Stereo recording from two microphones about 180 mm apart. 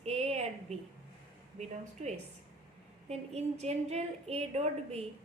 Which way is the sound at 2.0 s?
40° right (ahead or behind).